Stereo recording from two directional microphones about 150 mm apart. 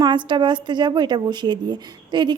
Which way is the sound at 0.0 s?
30° right (ahead or behind).